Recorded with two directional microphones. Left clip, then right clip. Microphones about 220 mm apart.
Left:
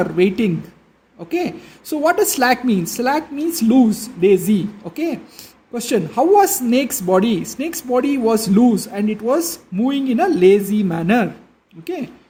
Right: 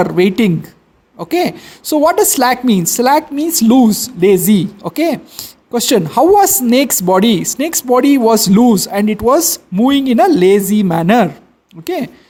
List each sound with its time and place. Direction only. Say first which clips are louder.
0.0 s speech: right 5 dB; 35° right (ahead or behind)